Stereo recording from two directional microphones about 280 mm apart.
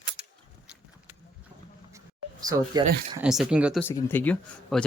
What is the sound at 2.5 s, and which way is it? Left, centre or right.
Speech, centre.